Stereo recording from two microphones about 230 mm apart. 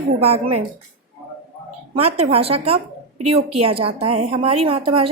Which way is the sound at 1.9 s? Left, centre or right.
Right.